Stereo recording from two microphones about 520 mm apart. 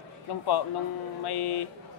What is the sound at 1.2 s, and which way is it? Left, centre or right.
Speech, left.